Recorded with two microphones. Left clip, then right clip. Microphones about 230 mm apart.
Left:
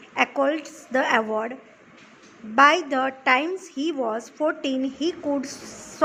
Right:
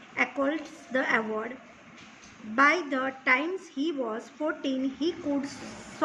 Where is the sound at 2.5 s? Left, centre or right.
Left.